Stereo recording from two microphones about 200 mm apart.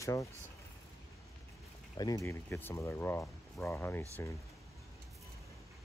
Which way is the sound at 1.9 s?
15° left (ahead or behind).